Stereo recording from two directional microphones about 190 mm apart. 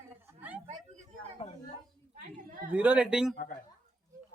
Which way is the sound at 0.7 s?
40° right (ahead or behind).